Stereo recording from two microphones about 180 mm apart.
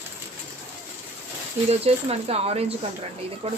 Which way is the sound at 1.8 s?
35° right (ahead or behind).